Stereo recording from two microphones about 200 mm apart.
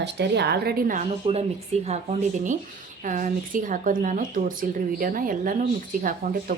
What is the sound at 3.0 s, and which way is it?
A woman's voice, 40° right (ahead or behind).